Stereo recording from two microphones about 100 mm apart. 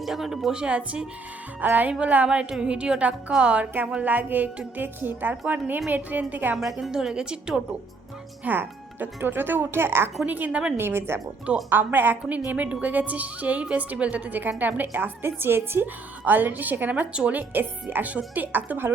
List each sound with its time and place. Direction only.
0.0 s a woman's voice: centre (ahead or behind)
6.6 s speech: centre (ahead or behind)
8.4 s a woman's voice: 20° right (ahead or behind)
10.8 s a woman's voice: 25° right (ahead or behind)